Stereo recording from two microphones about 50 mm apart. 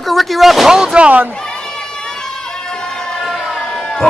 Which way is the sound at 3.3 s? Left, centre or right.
Centre.